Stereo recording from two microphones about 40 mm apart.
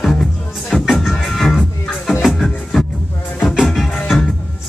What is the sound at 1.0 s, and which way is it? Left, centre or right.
Music, centre.